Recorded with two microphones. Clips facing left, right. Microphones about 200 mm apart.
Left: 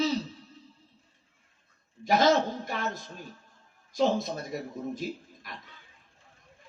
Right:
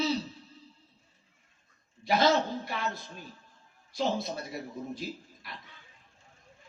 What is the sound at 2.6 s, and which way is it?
Speech, 45° left (ahead or behind).